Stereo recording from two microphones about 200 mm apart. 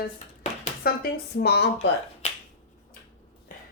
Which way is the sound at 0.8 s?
45° left (ahead or behind).